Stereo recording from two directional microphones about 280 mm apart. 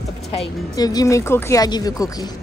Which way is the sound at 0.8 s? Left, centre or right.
Centre.